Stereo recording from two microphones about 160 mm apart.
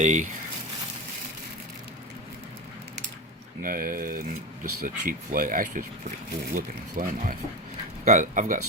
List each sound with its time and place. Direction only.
0.0 s speech: 50° right (ahead or behind)
3.6 s speech: 60° right (ahead or behind)